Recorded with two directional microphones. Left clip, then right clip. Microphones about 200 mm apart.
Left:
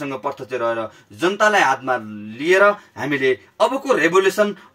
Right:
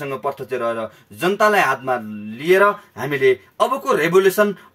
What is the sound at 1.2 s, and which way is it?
Speech, 15° right (ahead or behind).